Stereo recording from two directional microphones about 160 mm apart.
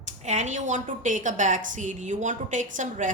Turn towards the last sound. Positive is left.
turn(degrees=-50)  # may be behind; listen again after turning